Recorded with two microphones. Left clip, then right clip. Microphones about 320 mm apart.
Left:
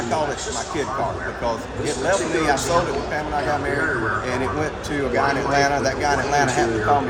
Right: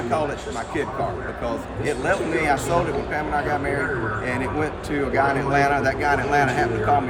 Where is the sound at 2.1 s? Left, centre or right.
Centre.